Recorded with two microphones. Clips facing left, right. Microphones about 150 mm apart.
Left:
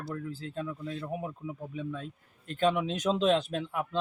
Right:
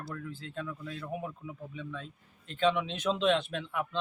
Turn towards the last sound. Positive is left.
turn(degrees=40)  # may be behind; listen again after turning